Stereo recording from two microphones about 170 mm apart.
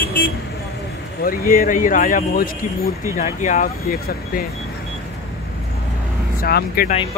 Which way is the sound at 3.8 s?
65° left (ahead or behind).